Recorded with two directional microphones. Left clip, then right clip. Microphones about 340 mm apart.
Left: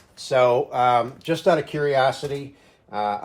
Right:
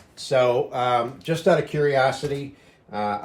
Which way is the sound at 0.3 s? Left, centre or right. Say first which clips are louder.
Left 2 dB; centre.